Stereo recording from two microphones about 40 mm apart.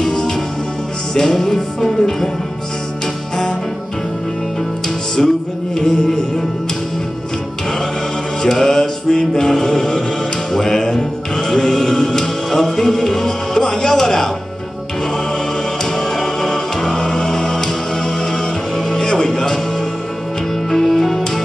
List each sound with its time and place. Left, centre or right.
0.0 s music: centre
4.8 s music: centre
8.4 s music: centre
15.8 s music: centre
20.7 s music: centre